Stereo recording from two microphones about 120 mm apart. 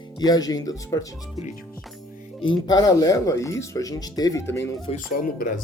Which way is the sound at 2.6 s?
35° left (ahead or behind).